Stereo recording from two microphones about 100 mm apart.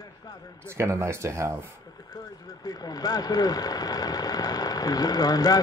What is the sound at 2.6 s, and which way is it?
Speech, 40° left (ahead or behind).